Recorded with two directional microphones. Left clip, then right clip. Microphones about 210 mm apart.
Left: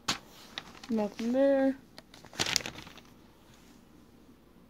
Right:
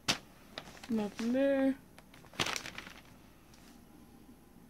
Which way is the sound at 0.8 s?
10° left (ahead or behind).